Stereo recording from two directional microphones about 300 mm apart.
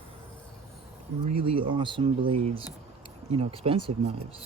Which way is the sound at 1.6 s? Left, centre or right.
Centre.